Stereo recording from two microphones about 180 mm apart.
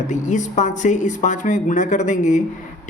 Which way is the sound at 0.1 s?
45° left (ahead or behind).